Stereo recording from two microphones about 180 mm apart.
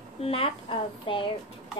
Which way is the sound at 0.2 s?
30° left (ahead or behind).